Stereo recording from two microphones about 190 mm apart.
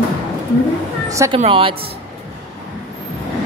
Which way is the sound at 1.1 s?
15° right (ahead or behind).